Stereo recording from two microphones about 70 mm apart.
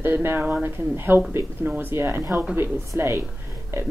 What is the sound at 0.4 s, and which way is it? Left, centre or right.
Speech, centre.